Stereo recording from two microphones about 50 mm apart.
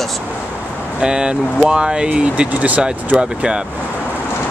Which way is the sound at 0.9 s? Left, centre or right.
Centre.